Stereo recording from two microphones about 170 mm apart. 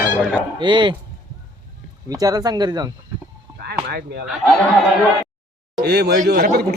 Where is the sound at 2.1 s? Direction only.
20° right (ahead or behind).